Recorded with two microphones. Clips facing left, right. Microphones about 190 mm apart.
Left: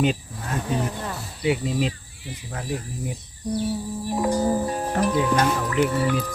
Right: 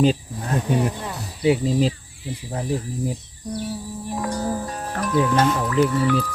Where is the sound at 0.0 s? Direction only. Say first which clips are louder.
Right 4 dB; 35° right (ahead or behind).